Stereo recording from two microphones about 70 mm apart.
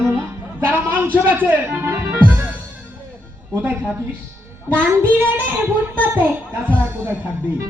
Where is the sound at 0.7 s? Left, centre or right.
Right.